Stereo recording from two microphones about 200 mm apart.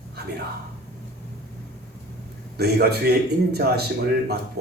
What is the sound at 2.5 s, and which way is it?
A man's voice, 55° right (ahead or behind).